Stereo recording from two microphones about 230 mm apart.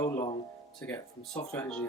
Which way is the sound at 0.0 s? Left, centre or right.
Centre.